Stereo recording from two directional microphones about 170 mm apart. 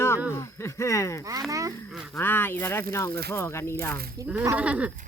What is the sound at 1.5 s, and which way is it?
Speech, 20° right (ahead or behind).